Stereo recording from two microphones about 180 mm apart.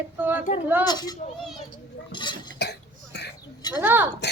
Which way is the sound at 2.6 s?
70° left (ahead or behind).